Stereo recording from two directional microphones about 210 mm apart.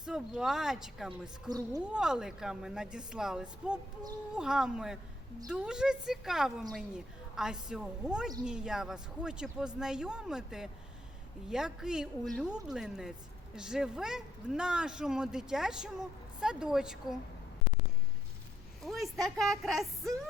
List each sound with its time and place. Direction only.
0.0 s speech: 5° right (ahead or behind)
1.5 s speech: 15° right (ahead or behind)
1.9 s speech: 5° right (ahead or behind)
18.9 s speech: centre (ahead or behind)